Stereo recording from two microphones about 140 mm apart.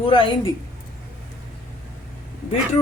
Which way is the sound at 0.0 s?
40° left (ahead or behind).